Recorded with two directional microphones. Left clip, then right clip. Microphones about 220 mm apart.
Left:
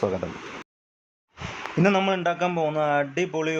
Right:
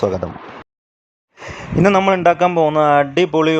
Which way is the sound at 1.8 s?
25° right (ahead or behind).